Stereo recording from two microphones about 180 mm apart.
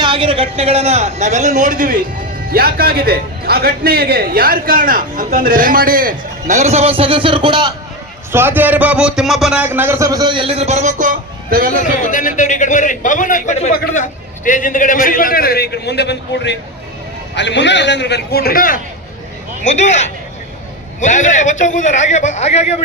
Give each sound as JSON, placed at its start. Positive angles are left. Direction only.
{"t": 0.0, "sound": "a man's voice", "side_deg": -30}
{"t": 8.3, "sound": "a man's voice", "side_deg": -10}
{"t": 12.0, "sound": "a man's voice", "side_deg": 45}
{"t": 19.6, "sound": "a man's voice", "side_deg": 40}